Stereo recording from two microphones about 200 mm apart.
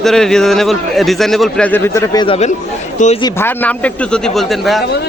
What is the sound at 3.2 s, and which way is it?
A man's voice, 10° left (ahead or behind).